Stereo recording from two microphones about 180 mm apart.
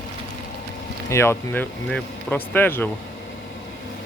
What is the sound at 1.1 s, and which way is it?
Speech, 15° left (ahead or behind).